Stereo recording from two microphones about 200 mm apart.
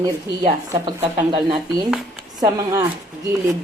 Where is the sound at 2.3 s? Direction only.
20° right (ahead or behind).